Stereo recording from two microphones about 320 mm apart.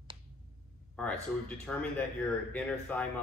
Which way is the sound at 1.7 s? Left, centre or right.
Centre.